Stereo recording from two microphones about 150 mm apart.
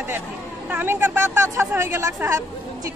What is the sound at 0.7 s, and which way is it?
A woman's voice, 15° right (ahead or behind).